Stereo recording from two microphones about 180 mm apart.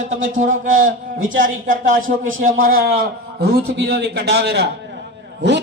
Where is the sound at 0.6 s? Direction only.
45° right (ahead or behind).